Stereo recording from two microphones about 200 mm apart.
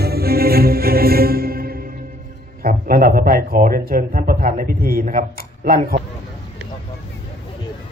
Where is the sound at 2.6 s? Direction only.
45° right (ahead or behind).